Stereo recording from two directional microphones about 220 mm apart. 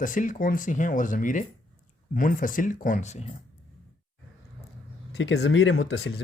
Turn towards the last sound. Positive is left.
turn(degrees=55)  # may be behind; listen again after turning